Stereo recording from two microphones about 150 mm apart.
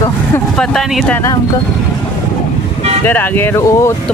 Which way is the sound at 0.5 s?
5° left (ahead or behind).